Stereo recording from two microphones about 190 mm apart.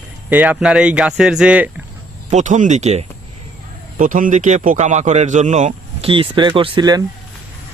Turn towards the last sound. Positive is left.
turn(degrees=-20)  # may be behind; listen again after turning